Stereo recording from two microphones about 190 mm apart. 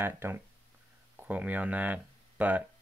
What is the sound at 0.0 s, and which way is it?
Speech, 10° right (ahead or behind).